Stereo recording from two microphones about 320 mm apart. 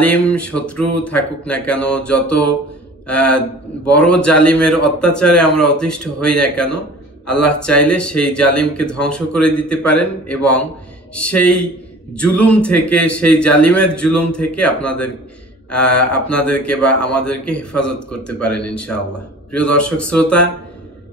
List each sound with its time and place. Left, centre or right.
0.0 s a man's voice: centre
3.1 s a man's voice: centre